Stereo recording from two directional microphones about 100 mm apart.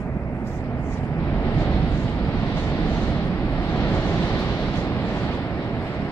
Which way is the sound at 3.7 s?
20° left (ahead or behind).